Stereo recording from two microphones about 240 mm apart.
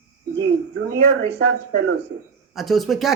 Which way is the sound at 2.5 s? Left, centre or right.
Centre.